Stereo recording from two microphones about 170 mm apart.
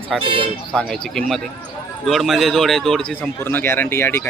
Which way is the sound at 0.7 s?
5° left (ahead or behind).